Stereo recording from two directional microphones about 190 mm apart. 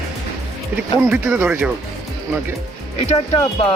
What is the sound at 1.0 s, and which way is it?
Speech, 10° right (ahead or behind).